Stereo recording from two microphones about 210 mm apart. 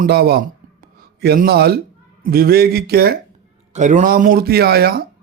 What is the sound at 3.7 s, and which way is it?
A man's voice, 35° right (ahead or behind).